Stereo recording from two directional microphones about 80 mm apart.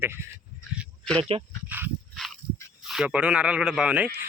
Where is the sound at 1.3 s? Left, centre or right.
Right.